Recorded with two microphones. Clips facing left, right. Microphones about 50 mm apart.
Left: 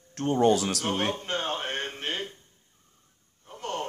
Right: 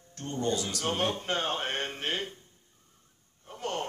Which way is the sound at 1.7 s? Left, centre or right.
Centre.